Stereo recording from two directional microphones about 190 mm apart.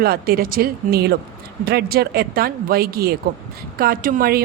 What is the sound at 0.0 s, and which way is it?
A woman's voice, 50° right (ahead or behind).